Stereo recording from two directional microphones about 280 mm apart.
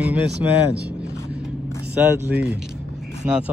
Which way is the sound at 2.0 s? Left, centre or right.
Centre.